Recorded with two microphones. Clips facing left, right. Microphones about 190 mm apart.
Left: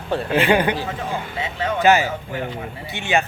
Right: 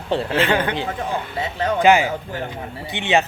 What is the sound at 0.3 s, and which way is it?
Speech, 15° left (ahead or behind).